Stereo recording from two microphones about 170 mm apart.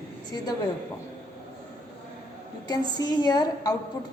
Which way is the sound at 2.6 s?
25° left (ahead or behind).